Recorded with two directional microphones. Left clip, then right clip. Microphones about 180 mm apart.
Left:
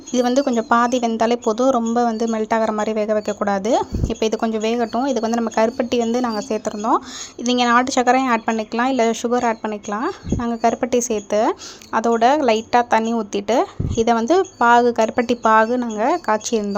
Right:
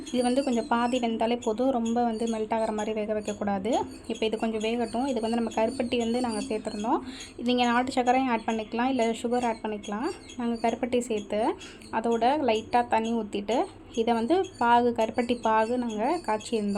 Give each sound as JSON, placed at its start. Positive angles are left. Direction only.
{"t": 0.1, "sound": "speech", "side_deg": 35}